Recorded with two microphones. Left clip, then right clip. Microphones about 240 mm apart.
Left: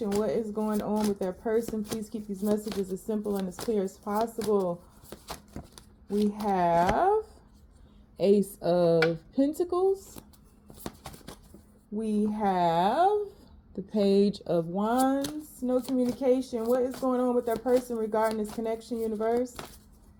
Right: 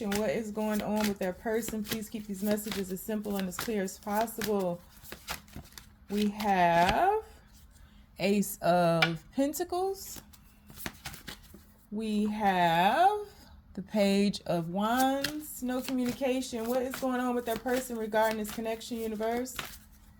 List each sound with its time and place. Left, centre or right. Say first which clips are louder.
0.0 s speech: left 3 dB; right
8.1 s speech: left 6 dB; right
11.9 s speech: left 3 dB; right